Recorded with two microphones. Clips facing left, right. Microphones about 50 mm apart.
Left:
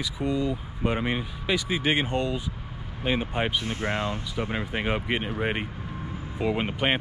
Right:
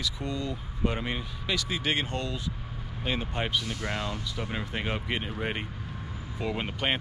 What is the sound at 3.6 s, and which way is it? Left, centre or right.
Speech, left.